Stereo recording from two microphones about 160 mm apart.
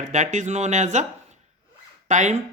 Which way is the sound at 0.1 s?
50° right (ahead or behind).